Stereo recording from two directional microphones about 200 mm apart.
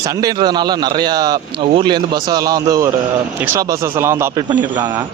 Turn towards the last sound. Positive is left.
turn(degrees=-20)  # may be behind; listen again after turning